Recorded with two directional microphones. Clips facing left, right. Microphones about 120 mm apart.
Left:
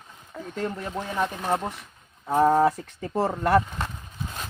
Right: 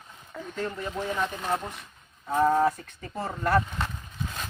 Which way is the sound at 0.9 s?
20° left (ahead or behind).